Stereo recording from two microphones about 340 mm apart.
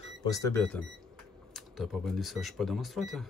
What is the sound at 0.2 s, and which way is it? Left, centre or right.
Speech, centre.